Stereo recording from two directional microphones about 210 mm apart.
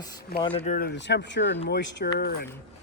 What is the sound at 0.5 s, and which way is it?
Speech, 40° left (ahead or behind).